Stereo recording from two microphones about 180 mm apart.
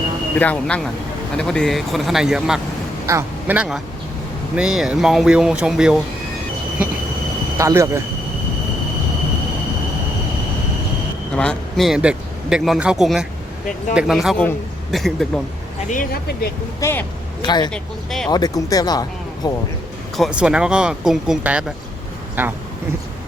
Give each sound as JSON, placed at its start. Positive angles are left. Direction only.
{"t": 0.3, "sound": "speech", "side_deg": 10}
{"t": 3.1, "sound": "a man's voice", "side_deg": -15}
{"t": 7.6, "sound": "a man's voice", "side_deg": -15}
{"t": 11.3, "sound": "speech", "side_deg": 5}
{"t": 15.9, "sound": "speech", "side_deg": 55}
{"t": 16.8, "sound": "speech", "side_deg": 10}
{"t": 17.4, "sound": "speech", "side_deg": 25}
{"t": 17.7, "sound": "speech", "side_deg": 0}
{"t": 18.3, "sound": "speech", "side_deg": 20}
{"t": 20.1, "sound": "a man's voice", "side_deg": 0}